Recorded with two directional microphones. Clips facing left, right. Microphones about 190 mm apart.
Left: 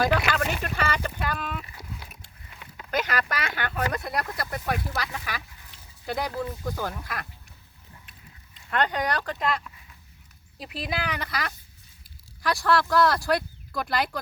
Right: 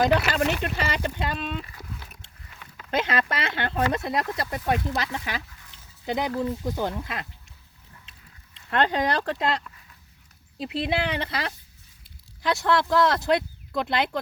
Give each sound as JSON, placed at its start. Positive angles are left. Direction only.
{"t": 0.6, "sound": "speech", "side_deg": -20}
{"t": 2.9, "sound": "speech", "side_deg": -25}
{"t": 8.7, "sound": "speech", "side_deg": -25}